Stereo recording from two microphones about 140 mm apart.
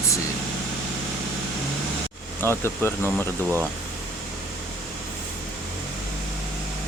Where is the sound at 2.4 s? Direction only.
15° left (ahead or behind).